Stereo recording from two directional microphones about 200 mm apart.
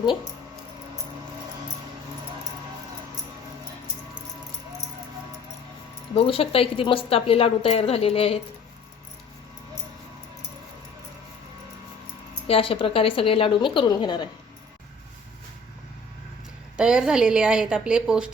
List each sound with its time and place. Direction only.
6.1 s a woman's voice: 30° left (ahead or behind)
12.5 s a woman's voice: 25° left (ahead or behind)
16.7 s a woman's voice: 5° right (ahead or behind)